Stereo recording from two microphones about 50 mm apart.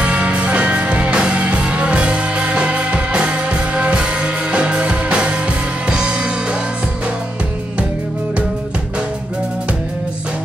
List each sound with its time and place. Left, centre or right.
0.0 s music: right